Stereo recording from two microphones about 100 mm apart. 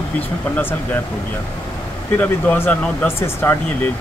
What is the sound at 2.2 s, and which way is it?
Speech, 20° left (ahead or behind).